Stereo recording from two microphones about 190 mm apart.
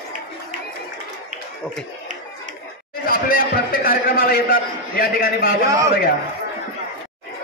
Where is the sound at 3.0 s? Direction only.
50° left (ahead or behind).